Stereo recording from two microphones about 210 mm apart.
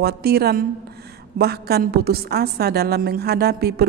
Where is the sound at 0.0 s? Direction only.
50° right (ahead or behind).